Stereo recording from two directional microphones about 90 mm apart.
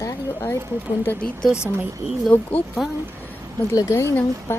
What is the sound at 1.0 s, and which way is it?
Speech, 10° left (ahead or behind).